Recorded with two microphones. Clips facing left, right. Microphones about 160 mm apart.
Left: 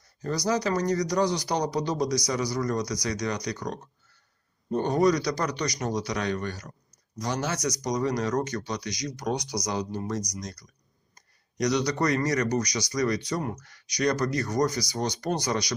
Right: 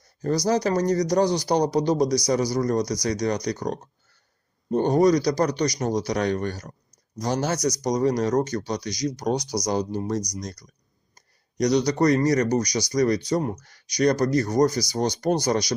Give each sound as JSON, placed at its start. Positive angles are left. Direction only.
{"t": 0.2, "sound": "speech", "side_deg": -40}